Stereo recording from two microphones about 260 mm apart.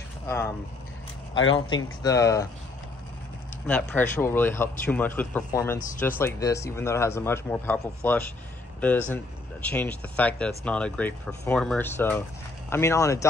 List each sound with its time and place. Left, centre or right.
1.3 s speech: left
2.0 s a man's voice: centre
3.6 s a man's voice: centre